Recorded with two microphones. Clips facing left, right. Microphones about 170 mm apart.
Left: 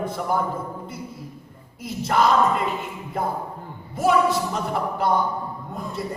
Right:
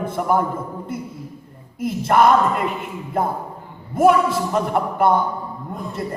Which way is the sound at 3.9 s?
55° right (ahead or behind).